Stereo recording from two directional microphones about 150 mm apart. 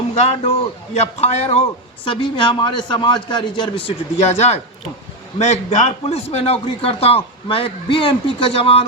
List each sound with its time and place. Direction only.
0.1 s a man's voice: 40° left (ahead or behind)
2.0 s a man's voice: 35° left (ahead or behind)